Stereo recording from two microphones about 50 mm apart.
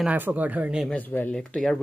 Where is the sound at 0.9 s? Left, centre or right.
Left.